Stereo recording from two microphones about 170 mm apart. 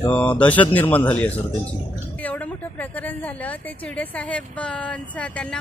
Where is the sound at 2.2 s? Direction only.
10° left (ahead or behind).